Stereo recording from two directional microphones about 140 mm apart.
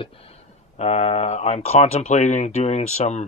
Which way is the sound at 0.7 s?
50° left (ahead or behind).